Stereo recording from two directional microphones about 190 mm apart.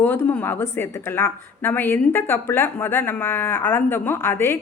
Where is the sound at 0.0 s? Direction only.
10° left (ahead or behind).